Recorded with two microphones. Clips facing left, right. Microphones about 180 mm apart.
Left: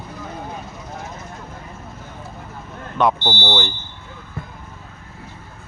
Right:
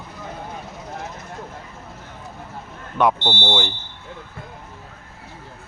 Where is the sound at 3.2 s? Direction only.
25° right (ahead or behind).